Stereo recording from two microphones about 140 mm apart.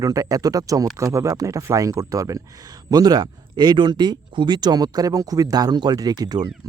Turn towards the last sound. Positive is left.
turn(degrees=-25)  # may be behind; listen again after turning